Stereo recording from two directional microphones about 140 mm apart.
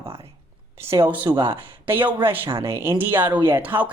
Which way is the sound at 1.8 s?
15° right (ahead or behind).